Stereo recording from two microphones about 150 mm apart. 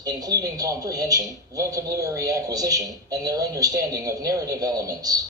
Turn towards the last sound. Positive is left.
turn(degrees=-25)  # may be behind; listen again after turning